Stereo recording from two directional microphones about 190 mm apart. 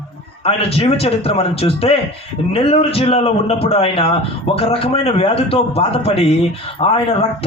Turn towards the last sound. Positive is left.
turn(degrees=30)  # may be behind; listen again after turning